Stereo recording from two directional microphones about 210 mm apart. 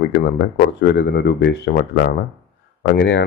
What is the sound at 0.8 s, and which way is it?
Speech, 55° left (ahead or behind).